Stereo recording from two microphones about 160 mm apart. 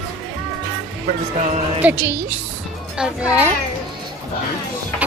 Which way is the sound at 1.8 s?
10° right (ahead or behind).